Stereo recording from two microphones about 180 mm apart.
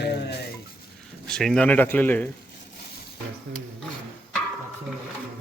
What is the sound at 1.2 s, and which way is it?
Speech, 5° left (ahead or behind).